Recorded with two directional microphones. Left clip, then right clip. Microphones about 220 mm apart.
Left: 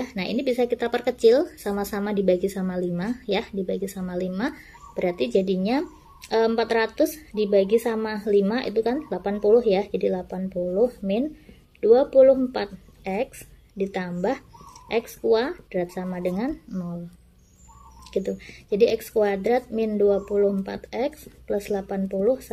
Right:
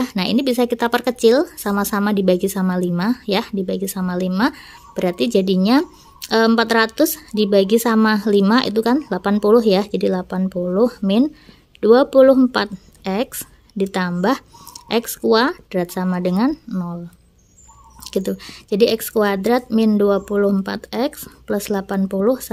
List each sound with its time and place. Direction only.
0.0 s a woman's voice: 40° right (ahead or behind)
18.2 s speech: 40° right (ahead or behind)